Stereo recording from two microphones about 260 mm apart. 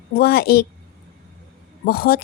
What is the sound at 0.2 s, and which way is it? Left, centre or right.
Speech, left.